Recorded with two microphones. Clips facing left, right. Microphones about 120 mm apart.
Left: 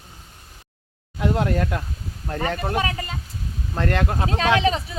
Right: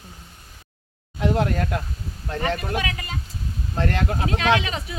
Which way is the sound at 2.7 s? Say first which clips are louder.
Left 3 dB; 35° left (ahead or behind).